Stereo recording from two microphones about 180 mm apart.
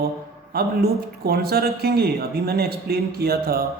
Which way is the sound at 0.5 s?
60° right (ahead or behind).